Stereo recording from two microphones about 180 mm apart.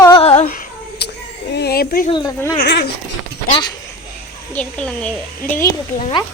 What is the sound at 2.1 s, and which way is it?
Speech, 25° left (ahead or behind).